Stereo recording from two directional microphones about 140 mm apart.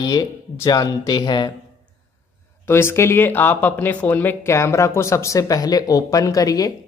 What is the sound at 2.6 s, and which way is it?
Speech, 15° left (ahead or behind).